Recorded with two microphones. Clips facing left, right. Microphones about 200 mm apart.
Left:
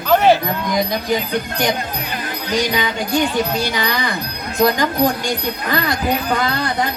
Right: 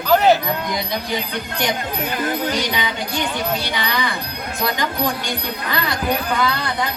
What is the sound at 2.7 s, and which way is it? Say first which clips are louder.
Speech: left 5 dB; 45° left (ahead or behind).